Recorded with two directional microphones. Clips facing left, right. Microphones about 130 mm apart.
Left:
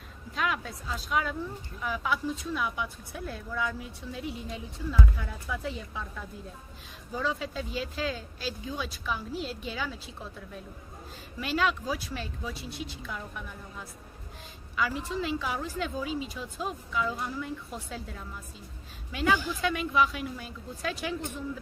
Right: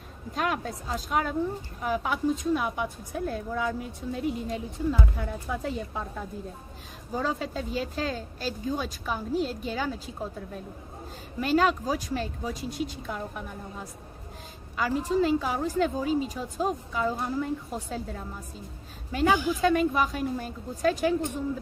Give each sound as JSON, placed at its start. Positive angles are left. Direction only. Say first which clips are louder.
{"t": 0.3, "sound": "a woman's voice", "louder": "right 3 dB", "side_deg": -45}